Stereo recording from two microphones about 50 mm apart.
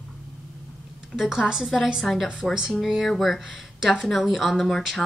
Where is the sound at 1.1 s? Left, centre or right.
Right.